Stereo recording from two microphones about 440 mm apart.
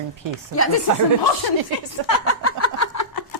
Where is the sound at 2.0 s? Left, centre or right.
Left.